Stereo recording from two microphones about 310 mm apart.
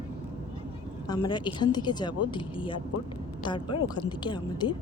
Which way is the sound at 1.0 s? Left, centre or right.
Centre.